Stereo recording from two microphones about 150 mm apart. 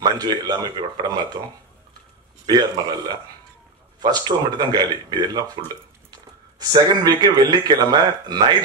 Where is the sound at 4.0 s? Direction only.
30° right (ahead or behind).